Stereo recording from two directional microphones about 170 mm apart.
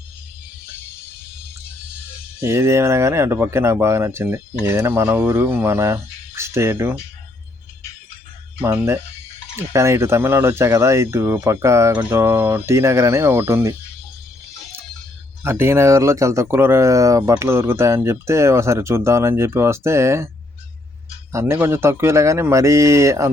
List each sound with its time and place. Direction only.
2.4 s speech: 15° right (ahead or behind)
8.6 s speech: 15° right (ahead or behind)
15.4 s speech: 15° right (ahead or behind)
21.3 s speech: 15° right (ahead or behind)